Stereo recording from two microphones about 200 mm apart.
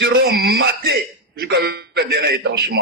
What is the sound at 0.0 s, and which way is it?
A man's voice, 50° right (ahead or behind).